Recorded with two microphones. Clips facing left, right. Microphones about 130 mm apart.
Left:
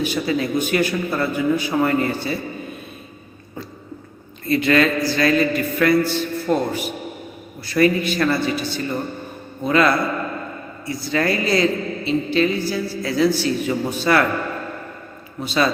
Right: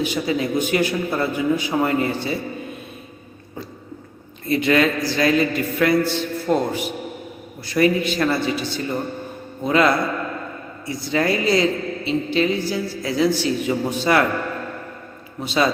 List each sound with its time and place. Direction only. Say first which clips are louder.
0.0 s a man's voice: left 1 dB; 20° right (ahead or behind)
4.4 s a man's voice: left 1 dB; 20° right (ahead or behind)
15.4 s a man's voice: even; 20° right (ahead or behind)